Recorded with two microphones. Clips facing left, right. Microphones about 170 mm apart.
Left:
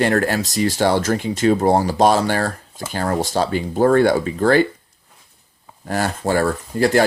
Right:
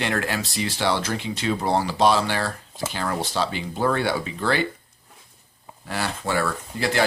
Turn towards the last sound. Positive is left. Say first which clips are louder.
# left 8 dB
turn(degrees=45)  # may be behind; listen again after turning